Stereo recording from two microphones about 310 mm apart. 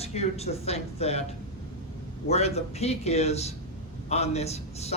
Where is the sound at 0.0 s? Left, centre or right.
Centre.